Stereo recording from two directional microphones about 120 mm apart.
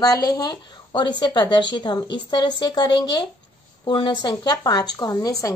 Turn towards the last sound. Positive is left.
turn(degrees=30)  # may be behind; listen again after turning